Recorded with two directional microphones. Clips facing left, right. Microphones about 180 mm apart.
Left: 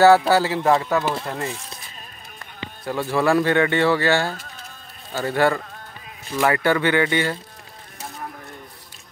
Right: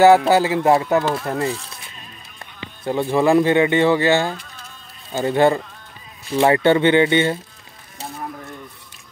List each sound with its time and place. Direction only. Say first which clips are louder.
0.0 s speech: right 2 dB; 20° right (ahead or behind)
1.2 s speech: right 6 dB; 35° right (ahead or behind)
2.8 s speech: right 4 dB; 20° right (ahead or behind)